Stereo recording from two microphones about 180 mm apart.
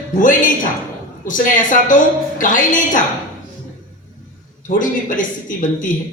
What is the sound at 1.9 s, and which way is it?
Speech, 45° left (ahead or behind).